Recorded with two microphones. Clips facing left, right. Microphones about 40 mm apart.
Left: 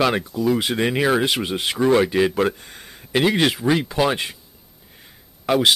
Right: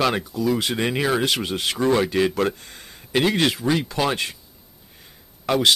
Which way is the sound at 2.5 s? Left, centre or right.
Centre.